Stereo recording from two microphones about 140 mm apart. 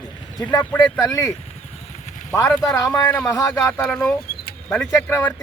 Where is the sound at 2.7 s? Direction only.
25° left (ahead or behind).